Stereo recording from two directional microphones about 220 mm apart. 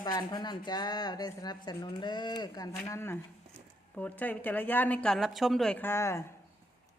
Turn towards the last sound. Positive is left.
turn(degrees=10)  # may be behind; listen again after turning